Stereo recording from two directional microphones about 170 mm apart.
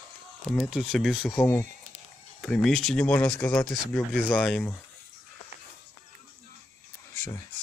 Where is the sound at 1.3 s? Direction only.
15° left (ahead or behind).